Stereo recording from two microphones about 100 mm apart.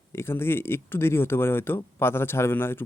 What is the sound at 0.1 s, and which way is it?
Speech, 25° left (ahead or behind).